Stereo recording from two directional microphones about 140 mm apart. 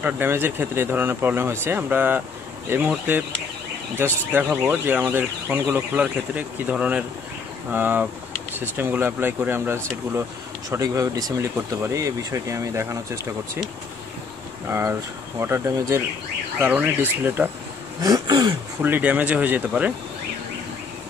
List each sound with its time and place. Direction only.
0.0 s speech: 15° right (ahead or behind)
4.0 s speech: 15° right (ahead or behind)
14.7 s speech: 20° right (ahead or behind)
18.0 s speech: 30° right (ahead or behind)
18.8 s speech: 10° right (ahead or behind)